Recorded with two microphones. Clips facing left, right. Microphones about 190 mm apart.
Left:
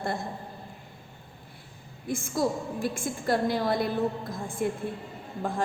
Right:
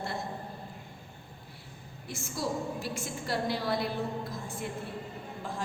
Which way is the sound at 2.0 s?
50° left (ahead or behind).